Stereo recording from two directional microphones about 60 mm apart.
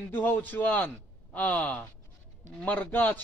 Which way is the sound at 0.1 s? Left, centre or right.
Left.